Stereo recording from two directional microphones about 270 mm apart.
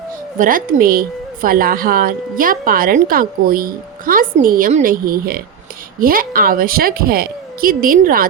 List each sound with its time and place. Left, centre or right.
0.3 s a woman's voice: right